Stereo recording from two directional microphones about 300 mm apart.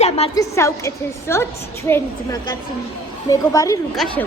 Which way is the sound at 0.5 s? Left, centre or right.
Centre.